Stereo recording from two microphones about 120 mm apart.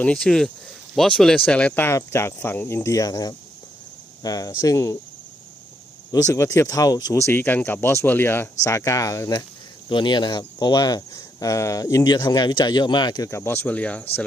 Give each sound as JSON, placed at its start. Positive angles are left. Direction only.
{"t": 0.0, "sound": "speech", "side_deg": 5}
{"t": 6.1, "sound": "speech", "side_deg": 30}
{"t": 9.9, "sound": "speech", "side_deg": 40}
{"t": 12.1, "sound": "speech", "side_deg": 40}
{"t": 13.3, "sound": "speech", "side_deg": 20}